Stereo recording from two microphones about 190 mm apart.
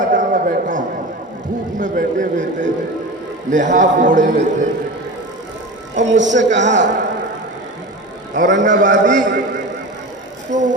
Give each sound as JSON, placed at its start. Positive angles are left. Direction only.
{"t": 0.0, "sound": "a sound", "side_deg": -45}
{"t": 3.5, "sound": "a man's voice", "side_deg": -40}
{"t": 5.9, "sound": "speech", "side_deg": -70}
{"t": 6.5, "sound": "speech", "side_deg": -40}
{"t": 8.4, "sound": "a man's voice", "side_deg": -45}
{"t": 9.2, "sound": "a sound", "side_deg": -70}